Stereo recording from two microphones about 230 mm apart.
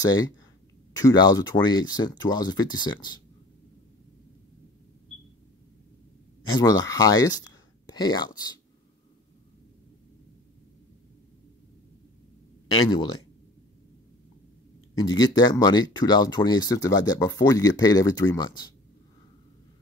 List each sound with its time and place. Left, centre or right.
0.0 s speech: centre
6.5 s speech: centre
12.6 s speech: centre
15.0 s speech: centre